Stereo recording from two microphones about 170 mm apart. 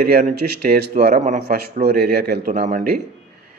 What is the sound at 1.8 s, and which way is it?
Speech, 65° right (ahead or behind).